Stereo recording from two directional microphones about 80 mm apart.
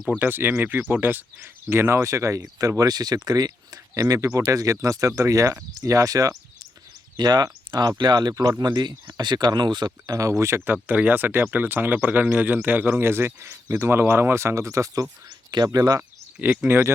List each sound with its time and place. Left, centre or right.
0.2 s speech: right
10.2 s speech: right
10.7 s speech: centre; by 15.0 s right
15.5 s speech: right
16.4 s speech: right